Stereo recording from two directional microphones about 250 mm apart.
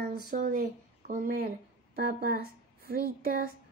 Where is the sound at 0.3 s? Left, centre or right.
Right.